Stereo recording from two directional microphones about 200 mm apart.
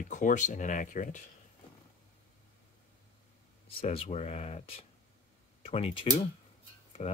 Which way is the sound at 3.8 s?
30° left (ahead or behind).